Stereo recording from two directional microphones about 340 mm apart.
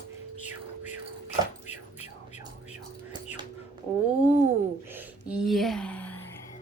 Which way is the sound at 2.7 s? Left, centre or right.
Centre.